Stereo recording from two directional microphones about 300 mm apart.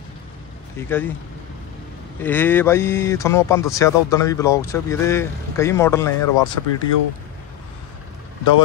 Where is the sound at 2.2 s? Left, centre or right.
Centre.